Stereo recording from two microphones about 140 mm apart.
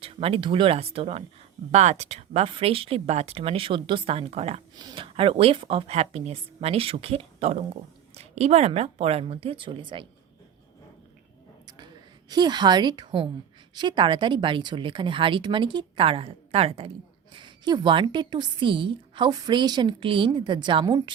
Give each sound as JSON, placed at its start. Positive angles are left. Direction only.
{"t": 0.0, "sound": "speech", "side_deg": -45}
{"t": 4.8, "sound": "speech", "side_deg": -35}
{"t": 12.3, "sound": "a woman's voice", "side_deg": -30}